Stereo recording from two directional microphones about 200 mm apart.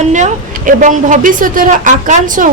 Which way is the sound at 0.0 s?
35° right (ahead or behind).